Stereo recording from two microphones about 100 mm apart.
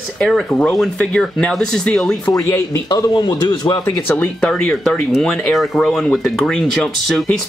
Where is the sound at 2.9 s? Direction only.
45° left (ahead or behind).